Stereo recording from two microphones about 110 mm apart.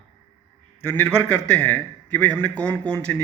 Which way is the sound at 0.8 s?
20° left (ahead or behind).